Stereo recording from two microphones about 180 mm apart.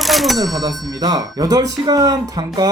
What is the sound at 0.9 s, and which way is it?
Speech, 20° right (ahead or behind).